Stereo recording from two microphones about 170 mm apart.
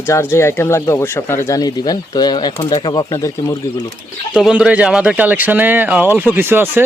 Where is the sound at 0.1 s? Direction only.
15° left (ahead or behind).